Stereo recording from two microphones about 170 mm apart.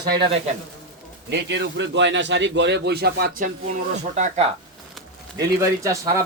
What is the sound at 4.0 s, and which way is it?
Speech, 45° right (ahead or behind).